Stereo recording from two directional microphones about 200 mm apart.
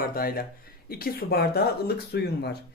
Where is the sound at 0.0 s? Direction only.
45° left (ahead or behind).